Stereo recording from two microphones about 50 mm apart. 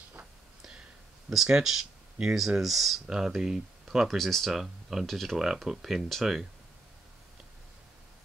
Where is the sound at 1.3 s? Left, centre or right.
Centre.